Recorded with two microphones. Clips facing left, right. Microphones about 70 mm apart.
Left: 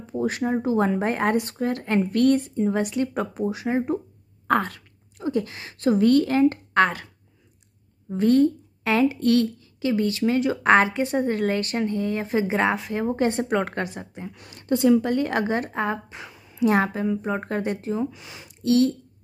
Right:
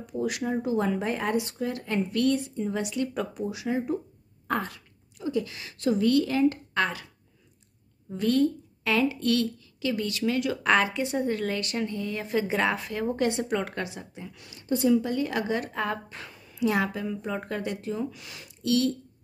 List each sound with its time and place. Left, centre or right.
0.0 s a woman's voice: left
1.1 s a woman's voice: left
4.5 s speech: left
8.1 s a woman's voice: left
13.3 s a woman's voice: left
16.1 s a sound: centre
16.5 s a woman's voice: left
18.6 s a woman's voice: left